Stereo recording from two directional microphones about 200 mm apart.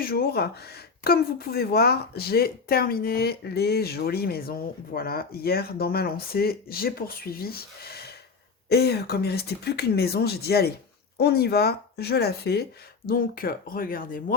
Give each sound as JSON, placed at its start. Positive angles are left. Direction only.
{"t": 0.0, "sound": "speech", "side_deg": 50}